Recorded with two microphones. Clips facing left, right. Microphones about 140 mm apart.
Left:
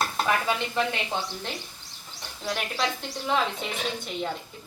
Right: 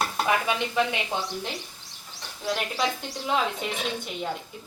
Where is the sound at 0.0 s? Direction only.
15° right (ahead or behind).